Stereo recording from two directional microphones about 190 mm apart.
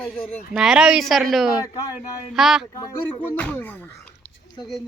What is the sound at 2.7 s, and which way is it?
Speech, 15° left (ahead or behind).